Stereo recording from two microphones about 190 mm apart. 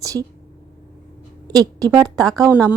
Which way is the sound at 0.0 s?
20° right (ahead or behind).